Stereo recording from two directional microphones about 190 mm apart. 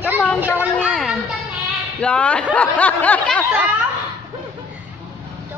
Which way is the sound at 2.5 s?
10° left (ahead or behind).